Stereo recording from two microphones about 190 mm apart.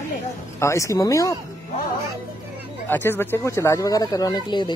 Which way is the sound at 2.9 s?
10° left (ahead or behind).